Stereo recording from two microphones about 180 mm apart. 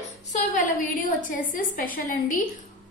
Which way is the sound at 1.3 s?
50° left (ahead or behind).